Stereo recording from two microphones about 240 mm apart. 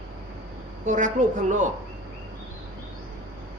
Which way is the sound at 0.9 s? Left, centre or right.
Right.